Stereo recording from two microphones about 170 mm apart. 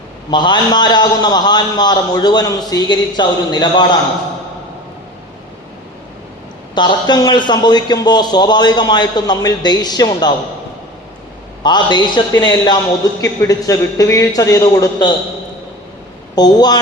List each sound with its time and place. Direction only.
0.3 s a man's voice: 25° left (ahead or behind)
6.7 s a man's voice: 25° left (ahead or behind)
11.6 s a man's voice: 25° left (ahead or behind)
16.3 s a man's voice: 25° left (ahead or behind)